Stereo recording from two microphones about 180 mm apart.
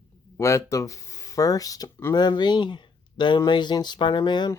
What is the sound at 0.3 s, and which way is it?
Speech, 15° left (ahead or behind).